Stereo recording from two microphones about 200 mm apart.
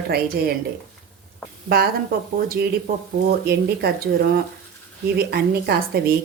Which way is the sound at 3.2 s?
50° right (ahead or behind).